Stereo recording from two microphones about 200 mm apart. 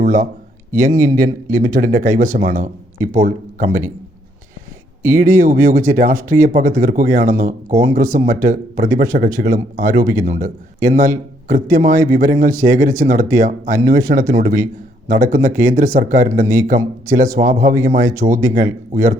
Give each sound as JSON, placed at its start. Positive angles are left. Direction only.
{"t": 0.0, "sound": "speech", "side_deg": -40}
{"t": 5.0, "sound": "a man's voice", "side_deg": -40}